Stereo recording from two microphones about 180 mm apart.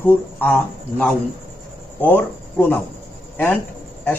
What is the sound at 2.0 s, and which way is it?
Speech, 10° left (ahead or behind).